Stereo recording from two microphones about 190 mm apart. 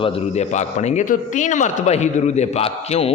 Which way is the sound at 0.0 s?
35° left (ahead or behind).